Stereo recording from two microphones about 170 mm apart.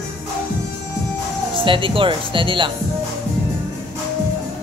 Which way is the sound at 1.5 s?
30° right (ahead or behind).